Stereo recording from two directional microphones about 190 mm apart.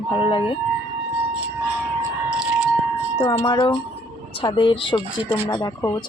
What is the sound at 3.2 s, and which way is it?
Speech, 20° left (ahead or behind).